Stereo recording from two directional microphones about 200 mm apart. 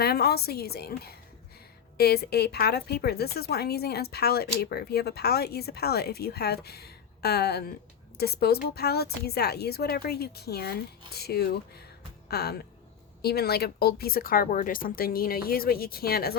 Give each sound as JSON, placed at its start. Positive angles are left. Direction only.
{"t": 0.0, "sound": "a woman's voice", "side_deg": 50}